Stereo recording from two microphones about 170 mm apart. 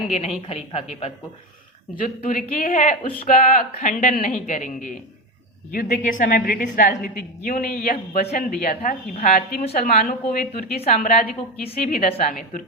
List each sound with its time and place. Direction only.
0.1 s a woman's voice: 40° left (ahead or behind)
2.0 s a woman's voice: 55° left (ahead or behind)
10.8 s a woman's voice: 45° left (ahead or behind)